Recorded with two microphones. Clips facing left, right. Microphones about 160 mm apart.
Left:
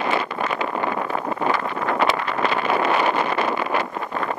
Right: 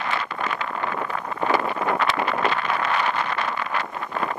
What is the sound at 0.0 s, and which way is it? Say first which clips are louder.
Wind noise: left 4 dB; 10° left (ahead or behind).